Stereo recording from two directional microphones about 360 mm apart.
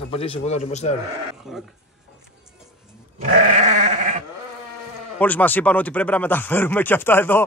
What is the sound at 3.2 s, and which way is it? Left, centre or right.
Goat, centre.